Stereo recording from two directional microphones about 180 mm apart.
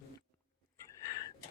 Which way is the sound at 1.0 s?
20° left (ahead or behind).